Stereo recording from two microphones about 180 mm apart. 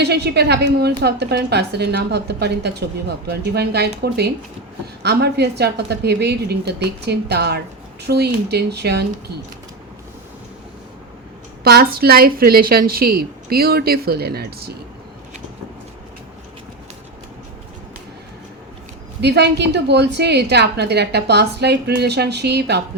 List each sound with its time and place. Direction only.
0.0 s a woman's voice: 65° right (ahead or behind)
11.6 s a woman's voice: 60° right (ahead or behind)
19.2 s a woman's voice: 70° right (ahead or behind)